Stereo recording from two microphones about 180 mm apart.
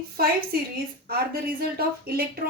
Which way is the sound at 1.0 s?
55° right (ahead or behind).